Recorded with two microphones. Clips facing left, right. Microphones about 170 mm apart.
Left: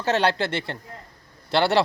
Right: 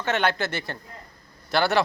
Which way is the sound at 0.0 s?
35° left (ahead or behind).